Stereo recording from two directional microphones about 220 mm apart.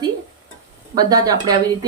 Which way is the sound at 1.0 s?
15° right (ahead or behind).